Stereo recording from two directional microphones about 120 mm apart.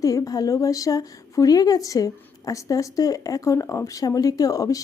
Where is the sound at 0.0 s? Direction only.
30° left (ahead or behind).